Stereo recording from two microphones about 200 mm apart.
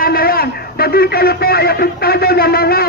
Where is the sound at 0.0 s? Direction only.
50° left (ahead or behind).